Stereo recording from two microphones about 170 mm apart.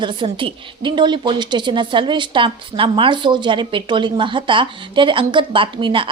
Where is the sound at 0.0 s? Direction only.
30° right (ahead or behind).